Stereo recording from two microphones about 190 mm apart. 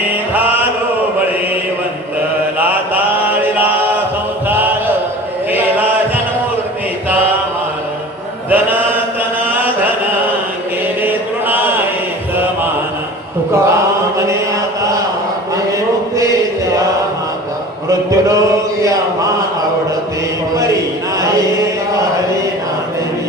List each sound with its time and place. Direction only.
4.5 s a sound: 10° right (ahead or behind)
5.5 s chant: 10° right (ahead or behind)
8.5 s mantra: 10° right (ahead or behind)
11.0 s chant: 10° right (ahead or behind)
13.7 s mantra: 15° right (ahead or behind)
16.2 s chant: 15° right (ahead or behind)
17.8 s a sound: 15° right (ahead or behind)